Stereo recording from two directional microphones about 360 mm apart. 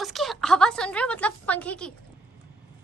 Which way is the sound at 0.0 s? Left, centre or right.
Centre.